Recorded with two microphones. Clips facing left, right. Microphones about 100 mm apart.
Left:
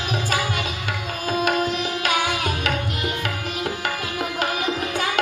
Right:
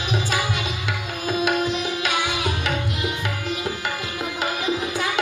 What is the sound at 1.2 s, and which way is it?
Tabla, 50° left (ahead or behind).